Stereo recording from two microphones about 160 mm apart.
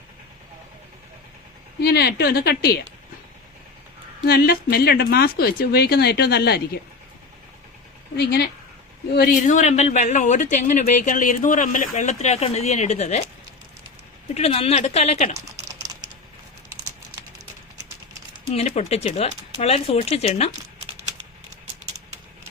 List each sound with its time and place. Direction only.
1.8 s a woman's voice: 90° left
4.3 s speech: 80° left
8.1 s a woman's voice: 90° left
9.3 s speech: 50° left (ahead or behind)
14.3 s speech: 40° left (ahead or behind)
18.5 s speech: 40° left (ahead or behind)